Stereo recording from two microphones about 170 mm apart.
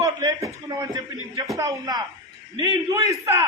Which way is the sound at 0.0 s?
20° right (ahead or behind).